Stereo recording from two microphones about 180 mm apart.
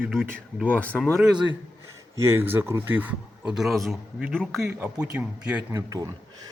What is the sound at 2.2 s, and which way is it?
Speech, 15° right (ahead or behind).